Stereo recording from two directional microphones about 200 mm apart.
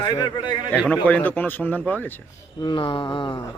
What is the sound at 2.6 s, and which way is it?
Speech, 25° left (ahead or behind).